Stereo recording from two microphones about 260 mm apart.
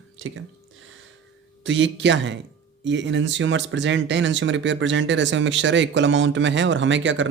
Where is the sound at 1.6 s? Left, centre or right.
Right.